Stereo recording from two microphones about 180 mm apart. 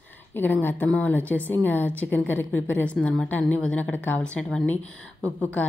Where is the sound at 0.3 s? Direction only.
10° left (ahead or behind).